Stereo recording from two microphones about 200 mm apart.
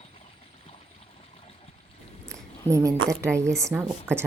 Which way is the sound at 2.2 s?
5° left (ahead or behind).